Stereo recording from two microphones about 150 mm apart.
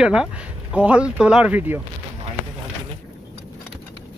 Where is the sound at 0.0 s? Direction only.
5° right (ahead or behind).